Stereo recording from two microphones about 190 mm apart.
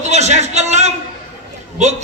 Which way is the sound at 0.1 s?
35° right (ahead or behind).